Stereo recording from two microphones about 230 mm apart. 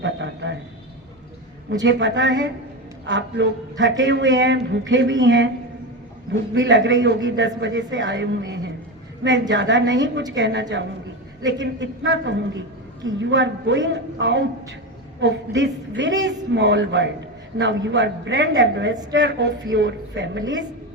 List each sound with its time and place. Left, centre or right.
0.0 s a sound: right
1.8 s a man's voice: right
6.5 s a man's voice: right